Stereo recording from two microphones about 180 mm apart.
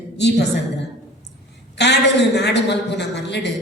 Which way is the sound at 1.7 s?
70° left (ahead or behind).